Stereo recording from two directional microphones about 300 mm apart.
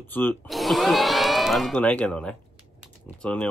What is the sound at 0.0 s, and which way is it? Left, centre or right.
Speech, centre.